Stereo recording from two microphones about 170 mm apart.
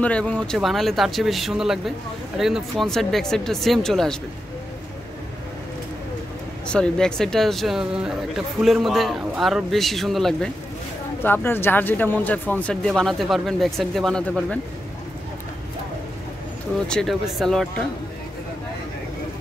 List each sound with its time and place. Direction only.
0.0 s a man's voice: 5° left (ahead or behind)
6.7 s a man's voice: 5° left (ahead or behind)
11.2 s speech: 10° left (ahead or behind)
16.8 s a man's voice: 5° left (ahead or behind)